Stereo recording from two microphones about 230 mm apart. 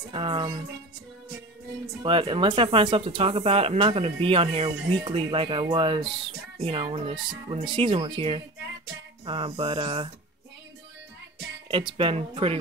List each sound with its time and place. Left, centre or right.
0.1 s speech: right
2.0 s speech: right
11.7 s speech: right